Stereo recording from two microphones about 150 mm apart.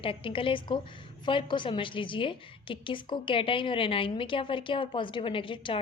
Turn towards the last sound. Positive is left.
turn(degrees=35)  # may be behind; listen again after turning